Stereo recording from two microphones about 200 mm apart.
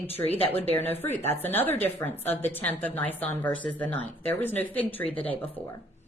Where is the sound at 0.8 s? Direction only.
10° left (ahead or behind).